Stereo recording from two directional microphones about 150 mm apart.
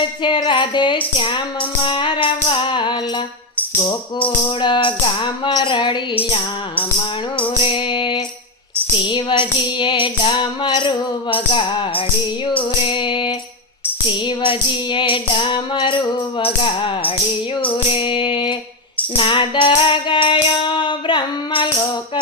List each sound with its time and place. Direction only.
0.2 s music: 30° left (ahead or behind)
4.6 s music: 35° left (ahead or behind)
7.4 s music: 35° left (ahead or behind)